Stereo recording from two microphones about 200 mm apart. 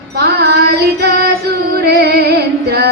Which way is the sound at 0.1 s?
55° right (ahead or behind).